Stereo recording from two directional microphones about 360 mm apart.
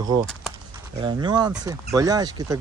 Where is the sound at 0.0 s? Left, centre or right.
Centre.